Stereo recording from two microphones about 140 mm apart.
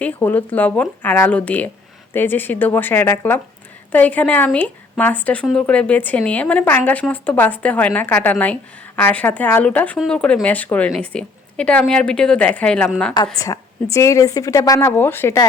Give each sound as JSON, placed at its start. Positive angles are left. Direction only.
{"t": 0.0, "sound": "speech", "side_deg": 15}
{"t": 13.4, "sound": "speech", "side_deg": 20}